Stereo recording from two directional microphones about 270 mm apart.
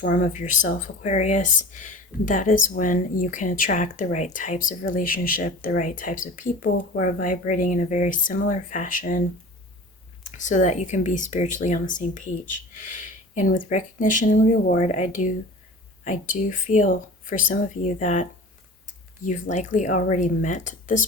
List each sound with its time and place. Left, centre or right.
0.0 s speech: left
10.2 s speech: left